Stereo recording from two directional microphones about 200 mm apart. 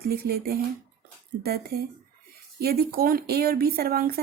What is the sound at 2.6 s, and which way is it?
Speech, 50° right (ahead or behind).